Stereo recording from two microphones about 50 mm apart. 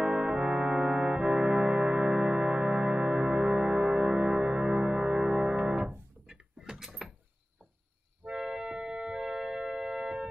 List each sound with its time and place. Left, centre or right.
0.0 s music: centre
6.2 s a sound: centre
6.8 s door: centre
8.3 s music: centre